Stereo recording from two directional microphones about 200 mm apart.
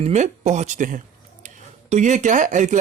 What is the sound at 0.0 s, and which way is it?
Speech, 35° right (ahead or behind).